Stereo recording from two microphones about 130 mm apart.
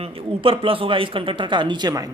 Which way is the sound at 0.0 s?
45° right (ahead or behind).